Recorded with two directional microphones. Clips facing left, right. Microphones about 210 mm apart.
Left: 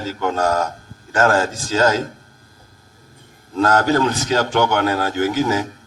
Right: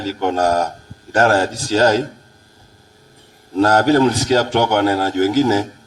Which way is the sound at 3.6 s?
35° right (ahead or behind).